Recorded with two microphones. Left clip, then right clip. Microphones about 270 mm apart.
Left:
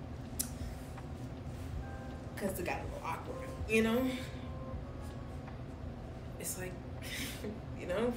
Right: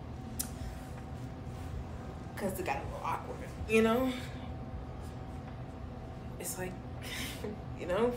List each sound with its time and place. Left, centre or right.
2.5 s speech: centre
6.6 s a sound: centre
7.9 s speech: centre